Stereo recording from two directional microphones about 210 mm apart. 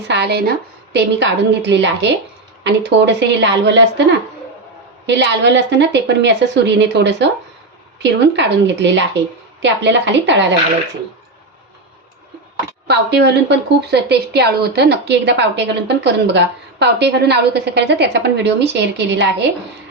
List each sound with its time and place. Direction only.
0.1 s a woman's voice: 50° right (ahead or behind)
5.0 s a woman's voice: 55° right (ahead or behind)
12.9 s a woman's voice: 55° right (ahead or behind)